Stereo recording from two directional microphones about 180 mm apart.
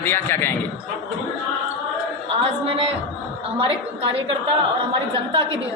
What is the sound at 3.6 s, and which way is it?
Speech, 30° right (ahead or behind).